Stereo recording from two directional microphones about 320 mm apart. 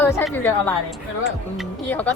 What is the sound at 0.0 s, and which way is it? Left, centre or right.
Speech, centre.